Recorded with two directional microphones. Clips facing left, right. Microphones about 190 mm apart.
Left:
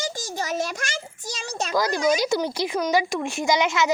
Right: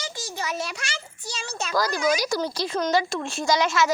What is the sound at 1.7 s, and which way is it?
Speech, 20° left (ahead or behind).